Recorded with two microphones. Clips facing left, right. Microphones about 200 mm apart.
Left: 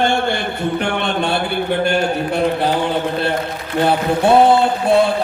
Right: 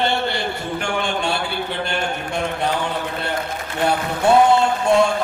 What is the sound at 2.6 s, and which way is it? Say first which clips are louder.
A man's voice: left 5 dB; 30° left (ahead or behind).